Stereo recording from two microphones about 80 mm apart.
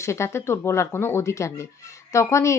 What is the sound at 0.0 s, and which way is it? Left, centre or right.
Speech, left.